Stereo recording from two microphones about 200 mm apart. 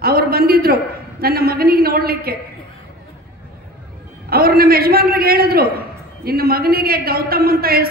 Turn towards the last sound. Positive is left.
turn(degrees=-50)  # may be behind; listen again after turning